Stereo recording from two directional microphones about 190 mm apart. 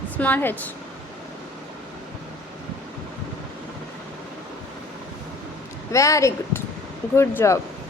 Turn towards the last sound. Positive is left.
turn(degrees=15)  # may be behind; listen again after turning